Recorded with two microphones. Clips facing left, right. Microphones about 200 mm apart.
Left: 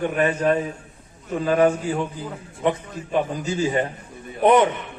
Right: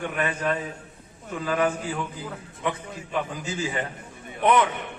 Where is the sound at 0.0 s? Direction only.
35° left (ahead or behind).